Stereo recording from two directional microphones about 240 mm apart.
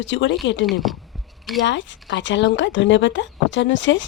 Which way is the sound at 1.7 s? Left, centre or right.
Left.